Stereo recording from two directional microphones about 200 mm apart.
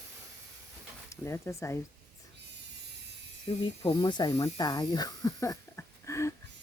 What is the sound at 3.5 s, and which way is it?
Speech, 25° left (ahead or behind).